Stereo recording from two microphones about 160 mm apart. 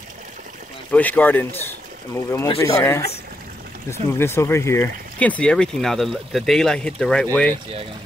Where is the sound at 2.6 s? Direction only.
15° left (ahead or behind).